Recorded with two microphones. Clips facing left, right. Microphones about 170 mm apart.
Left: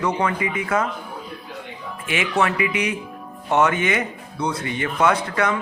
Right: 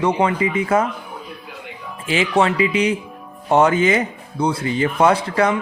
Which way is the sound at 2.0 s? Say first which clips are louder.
Right 4 dB; 30° right (ahead or behind).